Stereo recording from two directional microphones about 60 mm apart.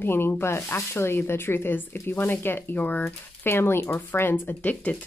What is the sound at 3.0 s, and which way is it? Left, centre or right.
Speech, left.